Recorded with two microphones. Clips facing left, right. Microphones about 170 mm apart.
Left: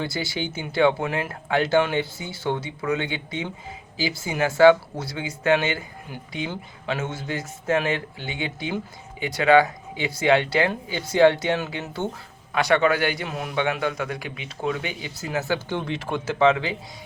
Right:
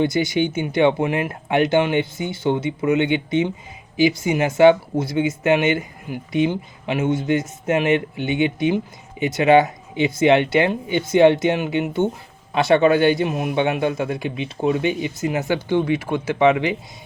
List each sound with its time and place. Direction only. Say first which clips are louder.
0.0 s speech: right 9 dB; 20° right (ahead or behind)